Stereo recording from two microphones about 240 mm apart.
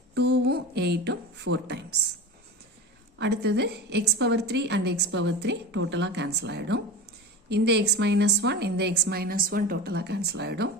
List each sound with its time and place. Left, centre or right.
0.1 s speech: right
3.2 s a woman's voice: right